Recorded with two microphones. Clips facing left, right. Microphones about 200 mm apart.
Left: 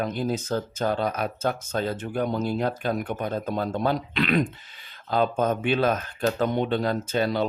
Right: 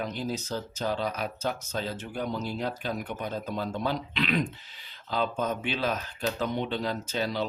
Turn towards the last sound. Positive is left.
turn(degrees=55)  # may be behind; listen again after turning